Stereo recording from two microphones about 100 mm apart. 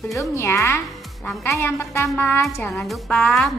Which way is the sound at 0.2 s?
25° left (ahead or behind).